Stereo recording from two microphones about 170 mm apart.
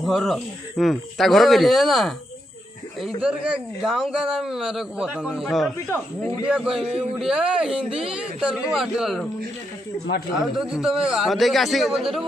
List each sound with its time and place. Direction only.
0.0 s a man's voice: centre (ahead or behind)
3.2 s a man's voice: 5° right (ahead or behind)
6.8 s speech: 35° right (ahead or behind)
7.2 s a man's voice: 5° right (ahead or behind)
10.4 s a man's voice: 5° right (ahead or behind)